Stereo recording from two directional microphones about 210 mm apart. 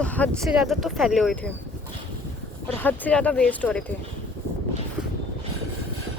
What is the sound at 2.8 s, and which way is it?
Speech, 10° left (ahead or behind).